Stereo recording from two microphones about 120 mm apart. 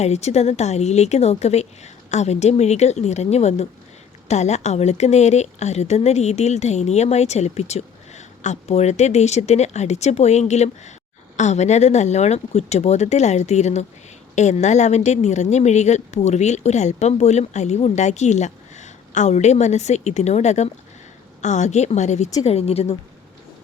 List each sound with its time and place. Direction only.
0.0 s a woman's voice: 65° left (ahead or behind)
22.4 s speech: 60° left (ahead or behind)